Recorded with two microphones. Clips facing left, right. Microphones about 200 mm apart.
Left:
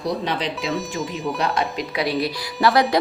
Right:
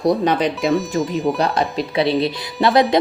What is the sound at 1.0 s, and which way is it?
Speech, centre (ahead or behind).